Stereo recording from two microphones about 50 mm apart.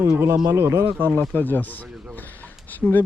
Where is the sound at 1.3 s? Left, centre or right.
Left.